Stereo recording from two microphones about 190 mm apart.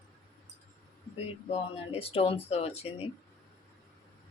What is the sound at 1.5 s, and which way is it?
Speech, 30° left (ahead or behind).